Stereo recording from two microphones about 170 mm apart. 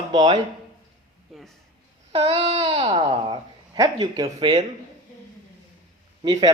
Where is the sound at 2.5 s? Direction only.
25° right (ahead or behind).